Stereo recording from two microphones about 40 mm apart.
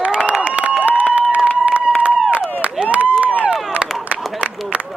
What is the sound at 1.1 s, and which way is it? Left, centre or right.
Run, right.